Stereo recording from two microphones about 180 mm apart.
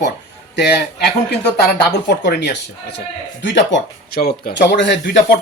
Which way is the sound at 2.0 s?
70° left (ahead or behind).